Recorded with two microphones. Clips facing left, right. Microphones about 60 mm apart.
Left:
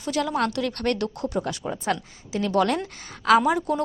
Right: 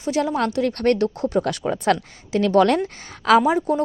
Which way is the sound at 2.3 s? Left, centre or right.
Right.